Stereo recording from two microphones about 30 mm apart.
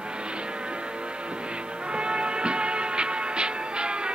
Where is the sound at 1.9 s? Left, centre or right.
Right.